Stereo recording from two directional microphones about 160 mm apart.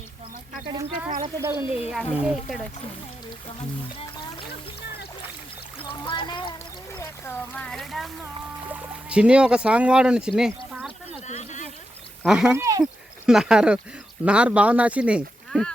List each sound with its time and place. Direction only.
0.7 s speech: 25° right (ahead or behind)
1.4 s speech: 15° right (ahead or behind)
1.9 s speech: 5° right (ahead or behind)
5.9 s speech: 30° left (ahead or behind)
6.9 s speech: 15° left (ahead or behind); by 11.2 s 5° right (ahead or behind)
11.3 s a sound: 50° left (ahead or behind)
12.2 s speech: 5° right (ahead or behind)
12.5 s speech: 20° right (ahead or behind)
12.8 s speech: 5° right (ahead or behind)